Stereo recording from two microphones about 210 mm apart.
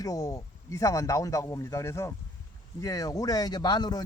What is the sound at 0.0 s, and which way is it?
Speech, 15° left (ahead or behind).